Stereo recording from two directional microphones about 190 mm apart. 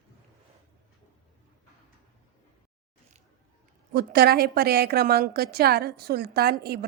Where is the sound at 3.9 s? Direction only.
55° right (ahead or behind).